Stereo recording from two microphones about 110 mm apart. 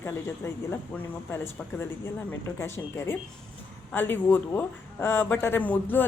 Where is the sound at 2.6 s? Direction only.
20° left (ahead or behind).